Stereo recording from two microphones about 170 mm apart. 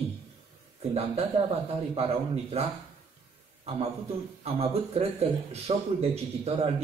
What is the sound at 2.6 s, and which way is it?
Speech, 40° right (ahead or behind).